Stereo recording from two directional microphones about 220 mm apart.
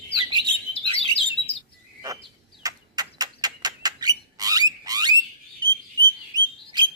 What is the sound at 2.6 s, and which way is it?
Bird, 15° right (ahead or behind).